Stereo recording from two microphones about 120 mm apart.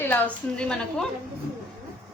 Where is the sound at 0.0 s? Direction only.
10° left (ahead or behind).